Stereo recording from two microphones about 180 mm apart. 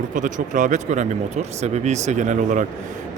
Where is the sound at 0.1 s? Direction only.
45° right (ahead or behind).